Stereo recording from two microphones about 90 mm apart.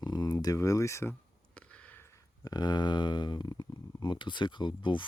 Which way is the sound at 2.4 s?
45° left (ahead or behind).